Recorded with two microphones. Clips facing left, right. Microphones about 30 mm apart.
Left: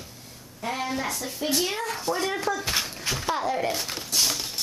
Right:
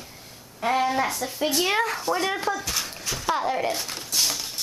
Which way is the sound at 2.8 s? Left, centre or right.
Centre.